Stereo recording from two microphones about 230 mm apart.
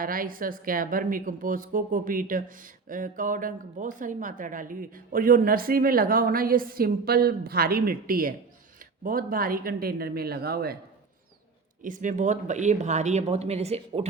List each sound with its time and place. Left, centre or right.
0.0 s a woman's voice: right
11.8 s a woman's voice: right